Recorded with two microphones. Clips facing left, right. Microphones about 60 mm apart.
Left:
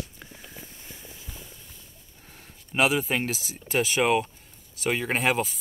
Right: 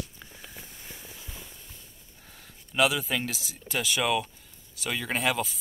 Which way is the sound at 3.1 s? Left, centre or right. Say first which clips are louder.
Left 3 dB; left.